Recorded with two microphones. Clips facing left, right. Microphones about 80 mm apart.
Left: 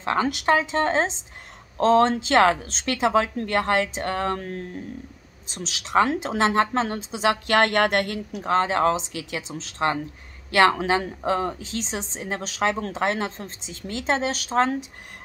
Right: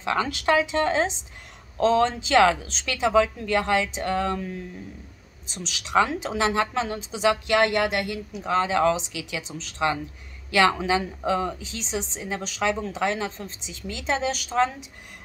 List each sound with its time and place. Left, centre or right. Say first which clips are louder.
0.0 s a woman's voice: left 2 dB; left
5.5 s a woman's voice: left 1 dB; left